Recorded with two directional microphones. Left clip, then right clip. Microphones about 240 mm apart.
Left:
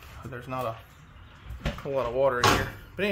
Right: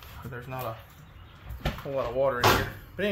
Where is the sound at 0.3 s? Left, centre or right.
Left.